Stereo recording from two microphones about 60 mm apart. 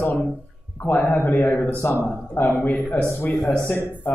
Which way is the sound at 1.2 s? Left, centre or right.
Left.